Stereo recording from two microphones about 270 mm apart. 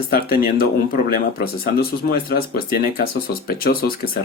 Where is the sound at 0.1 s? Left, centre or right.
Left.